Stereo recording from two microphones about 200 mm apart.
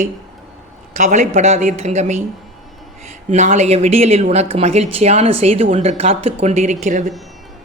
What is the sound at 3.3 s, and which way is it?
A man's voice, 35° right (ahead or behind).